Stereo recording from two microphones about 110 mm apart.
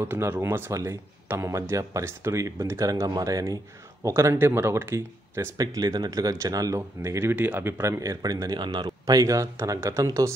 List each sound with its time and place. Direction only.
0.0 s speech: 20° right (ahead or behind)
5.8 s speech: 35° right (ahead or behind)